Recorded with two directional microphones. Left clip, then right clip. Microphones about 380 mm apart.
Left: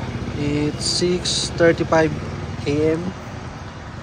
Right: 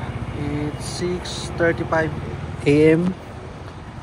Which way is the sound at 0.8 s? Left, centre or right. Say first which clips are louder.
Left 6 dB; centre.